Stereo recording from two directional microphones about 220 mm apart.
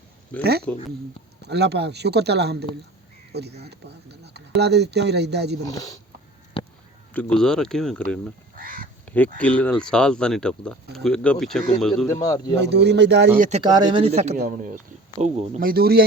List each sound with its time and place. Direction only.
0.7 s speech: 10° left (ahead or behind)
1.4 s speech: 50° right (ahead or behind)
5.6 s speech: 15° left (ahead or behind)
6.5 s a sound: 25° left (ahead or behind)
7.1 s speech: 5° left (ahead or behind)
8.5 s goose: 40° right (ahead or behind)
9.0 s a sound: 5° left (ahead or behind)
9.4 s speech: 5° left (ahead or behind)
12.0 s speech: 15° left (ahead or behind)
12.5 s speech: 50° right (ahead or behind)
13.4 s speech: 30° right (ahead or behind)